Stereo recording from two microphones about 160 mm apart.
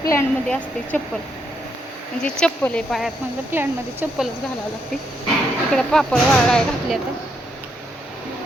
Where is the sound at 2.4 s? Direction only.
5° left (ahead or behind).